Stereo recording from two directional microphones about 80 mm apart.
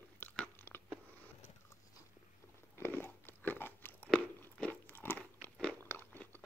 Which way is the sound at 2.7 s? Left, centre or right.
Left.